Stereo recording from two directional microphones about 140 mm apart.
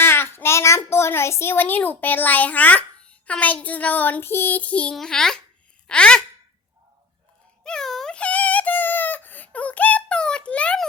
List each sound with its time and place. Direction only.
0.0 s a child's voice: 15° left (ahead or behind)
5.9 s sigh: 5° left (ahead or behind)
7.6 s a sound: 5° left (ahead or behind)